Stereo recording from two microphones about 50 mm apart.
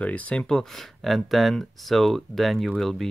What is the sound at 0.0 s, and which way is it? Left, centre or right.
Speech, left.